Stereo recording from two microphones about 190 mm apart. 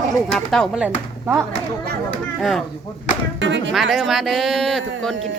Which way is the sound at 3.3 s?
70° right (ahead or behind).